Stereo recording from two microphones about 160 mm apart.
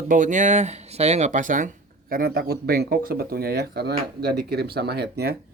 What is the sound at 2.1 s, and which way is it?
Speech, 70° right (ahead or behind).